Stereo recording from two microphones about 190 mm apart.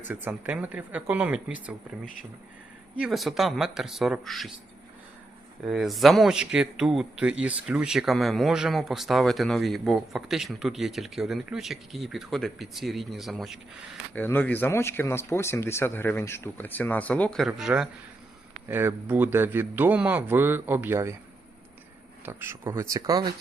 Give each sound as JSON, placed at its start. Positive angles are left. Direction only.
{"t": 0.1, "sound": "a man's voice", "side_deg": -10}
{"t": 3.0, "sound": "a man's voice", "side_deg": 0}
{"t": 5.6, "sound": "a man's voice", "side_deg": 0}
{"t": 14.2, "sound": "a man's voice", "side_deg": 10}
{"t": 22.3, "sound": "a man's voice", "side_deg": -10}